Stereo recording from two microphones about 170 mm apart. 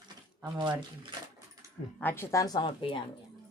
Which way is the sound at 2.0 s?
10° left (ahead or behind).